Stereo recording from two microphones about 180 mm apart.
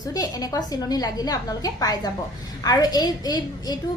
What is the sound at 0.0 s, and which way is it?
A woman's voice, 20° left (ahead or behind).